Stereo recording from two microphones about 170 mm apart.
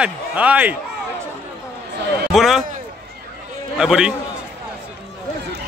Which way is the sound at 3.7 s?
5° right (ahead or behind).